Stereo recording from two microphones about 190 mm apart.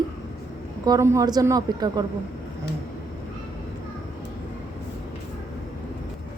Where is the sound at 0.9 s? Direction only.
15° right (ahead or behind).